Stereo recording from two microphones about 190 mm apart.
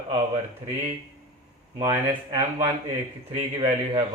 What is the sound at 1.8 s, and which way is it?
Speech, 20° right (ahead or behind).